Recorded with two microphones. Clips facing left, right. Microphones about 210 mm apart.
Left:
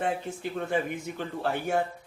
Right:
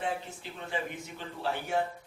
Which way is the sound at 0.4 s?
50° left (ahead or behind).